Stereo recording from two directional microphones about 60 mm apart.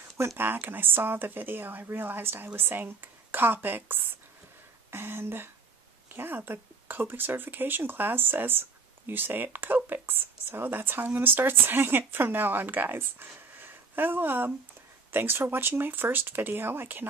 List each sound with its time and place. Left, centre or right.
0.4 s speech: right